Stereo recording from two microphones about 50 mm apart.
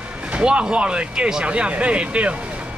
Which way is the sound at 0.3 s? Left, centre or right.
Right.